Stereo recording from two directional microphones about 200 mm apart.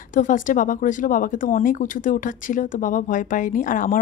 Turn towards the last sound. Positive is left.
turn(degrees=40)  # may be behind; listen again after turning